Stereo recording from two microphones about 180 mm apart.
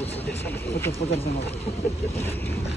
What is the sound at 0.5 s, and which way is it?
Speech, 15° left (ahead or behind).